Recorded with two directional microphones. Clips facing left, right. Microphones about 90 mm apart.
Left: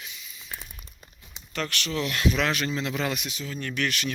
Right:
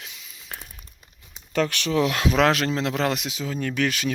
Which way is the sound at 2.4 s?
90° right.